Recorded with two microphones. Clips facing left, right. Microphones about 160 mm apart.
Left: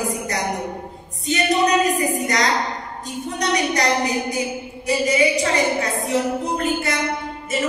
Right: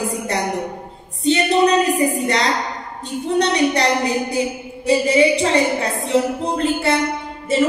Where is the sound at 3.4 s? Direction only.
30° right (ahead or behind).